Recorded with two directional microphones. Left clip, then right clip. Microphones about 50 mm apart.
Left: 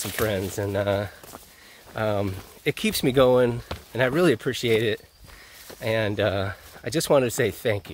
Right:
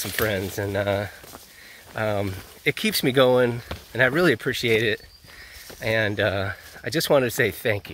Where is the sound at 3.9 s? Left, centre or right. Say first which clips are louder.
Right 2 dB; left.